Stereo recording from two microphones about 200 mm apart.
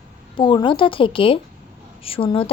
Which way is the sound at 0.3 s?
25° left (ahead or behind).